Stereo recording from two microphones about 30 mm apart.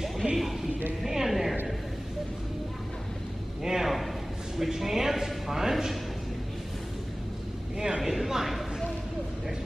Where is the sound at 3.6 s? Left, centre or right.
Centre.